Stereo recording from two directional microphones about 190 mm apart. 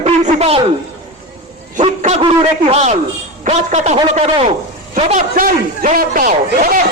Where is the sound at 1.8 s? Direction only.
40° right (ahead or behind).